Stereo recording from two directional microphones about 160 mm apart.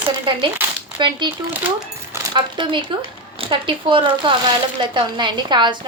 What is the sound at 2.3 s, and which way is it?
A woman's voice, 30° right (ahead or behind).